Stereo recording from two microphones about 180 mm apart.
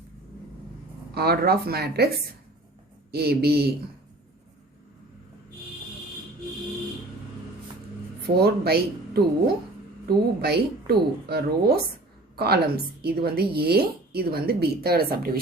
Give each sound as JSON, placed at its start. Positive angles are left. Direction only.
{"t": 1.1, "sound": "a woman's voice", "side_deg": -60}
{"t": 8.4, "sound": "a woman's voice", "side_deg": -60}